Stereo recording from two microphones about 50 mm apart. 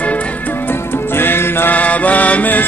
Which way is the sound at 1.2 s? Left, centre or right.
Left.